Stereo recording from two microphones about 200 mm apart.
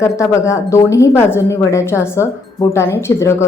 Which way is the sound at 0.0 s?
15° left (ahead or behind).